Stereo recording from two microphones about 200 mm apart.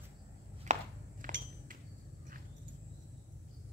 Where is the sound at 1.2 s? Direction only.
40° right (ahead or behind).